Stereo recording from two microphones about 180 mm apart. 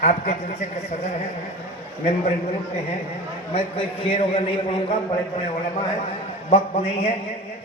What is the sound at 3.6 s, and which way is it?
A man's voice, 30° left (ahead or behind).